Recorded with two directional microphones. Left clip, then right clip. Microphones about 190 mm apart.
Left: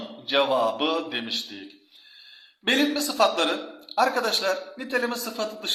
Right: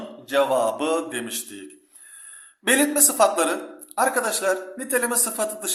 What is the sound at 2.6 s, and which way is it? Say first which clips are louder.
Speech: right 3 dB; 20° right (ahead or behind).